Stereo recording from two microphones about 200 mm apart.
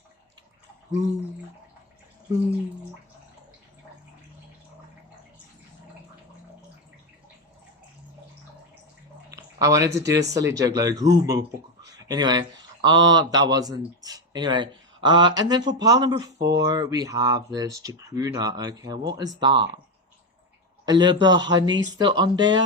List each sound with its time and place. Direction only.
9.3 s speech: 15° right (ahead or behind)
16.4 s speech: 55° right (ahead or behind)
16.6 s speech: 20° right (ahead or behind)
20.8 s speech: 20° right (ahead or behind)